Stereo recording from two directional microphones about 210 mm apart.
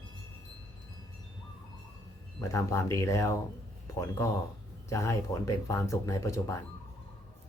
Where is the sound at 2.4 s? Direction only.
15° left (ahead or behind).